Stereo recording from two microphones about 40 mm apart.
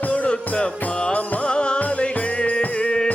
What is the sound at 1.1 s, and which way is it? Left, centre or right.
Music, left.